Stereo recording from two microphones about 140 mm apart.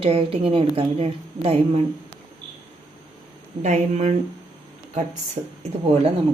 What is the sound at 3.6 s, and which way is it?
Speech, 55° right (ahead or behind).